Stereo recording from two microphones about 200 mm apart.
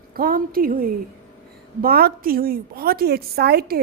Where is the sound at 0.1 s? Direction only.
45° right (ahead or behind).